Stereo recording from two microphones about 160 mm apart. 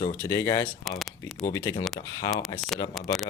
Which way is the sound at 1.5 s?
20° left (ahead or behind).